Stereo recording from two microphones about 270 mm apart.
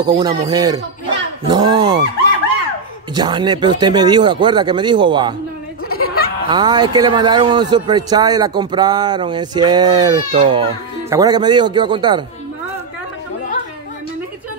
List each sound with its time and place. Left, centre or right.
0.0 s speech: centre
3.2 s speech: centre
5.9 s a sound: left
6.5 s speech: centre